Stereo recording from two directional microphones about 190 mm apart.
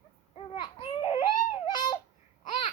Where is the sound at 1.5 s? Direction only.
25° left (ahead or behind).